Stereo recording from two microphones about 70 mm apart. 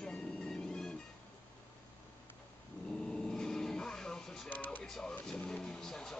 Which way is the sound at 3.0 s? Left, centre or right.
Centre.